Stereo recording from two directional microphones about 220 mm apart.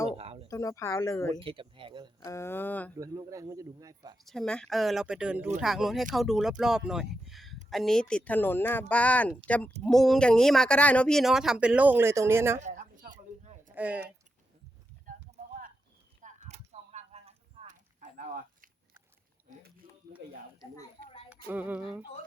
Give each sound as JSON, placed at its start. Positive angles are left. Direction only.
{"t": 0.2, "sound": "a sound", "side_deg": -30}
{"t": 0.4, "sound": "speech", "side_deg": 15}
{"t": 1.5, "sound": "speech", "side_deg": -25}
{"t": 2.2, "sound": "speech", "side_deg": 10}
{"t": 3.0, "sound": "speech", "side_deg": -15}
{"t": 4.3, "sound": "speech", "side_deg": 5}
{"t": 12.5, "sound": "a sound", "side_deg": -35}
{"t": 13.7, "sound": "speech", "side_deg": -5}
{"t": 15.0, "sound": "clip-clop", "side_deg": -35}
{"t": 16.2, "sound": "a sound", "side_deg": -30}
{"t": 21.2, "sound": "music", "side_deg": -10}